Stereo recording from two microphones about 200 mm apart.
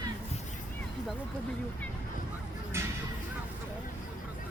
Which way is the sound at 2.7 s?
15° right (ahead or behind).